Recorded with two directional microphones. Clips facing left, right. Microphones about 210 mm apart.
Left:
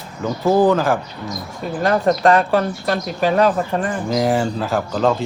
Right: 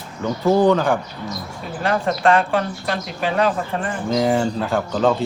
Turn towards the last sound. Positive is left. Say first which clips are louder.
# even
turn(degrees=0)  # may be behind; listen again after turning